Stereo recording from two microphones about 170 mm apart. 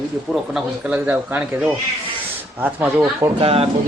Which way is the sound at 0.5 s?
5° right (ahead or behind).